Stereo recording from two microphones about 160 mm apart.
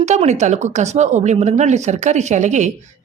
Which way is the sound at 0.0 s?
45° right (ahead or behind).